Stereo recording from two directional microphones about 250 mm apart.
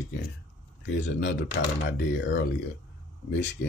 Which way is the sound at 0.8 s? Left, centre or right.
Left.